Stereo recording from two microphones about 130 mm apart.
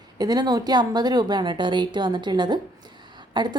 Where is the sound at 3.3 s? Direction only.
35° right (ahead or behind).